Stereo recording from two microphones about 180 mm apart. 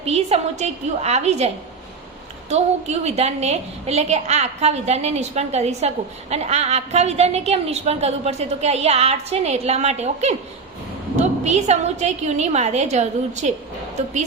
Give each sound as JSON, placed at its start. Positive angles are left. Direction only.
{"t": 0.0, "sound": "a woman's voice", "side_deg": -35}
{"t": 2.5, "sound": "a woman's voice", "side_deg": -40}